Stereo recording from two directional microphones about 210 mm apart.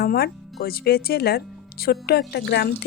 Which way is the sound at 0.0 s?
45° left (ahead or behind).